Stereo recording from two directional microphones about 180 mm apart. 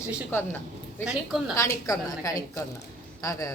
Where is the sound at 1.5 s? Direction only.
20° left (ahead or behind).